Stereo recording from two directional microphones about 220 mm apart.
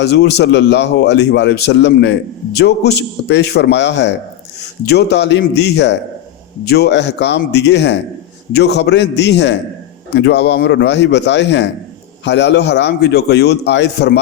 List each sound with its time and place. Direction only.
0.0 s a man's voice: 50° left (ahead or behind)